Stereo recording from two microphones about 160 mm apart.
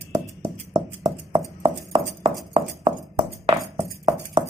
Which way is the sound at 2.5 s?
35° right (ahead or behind).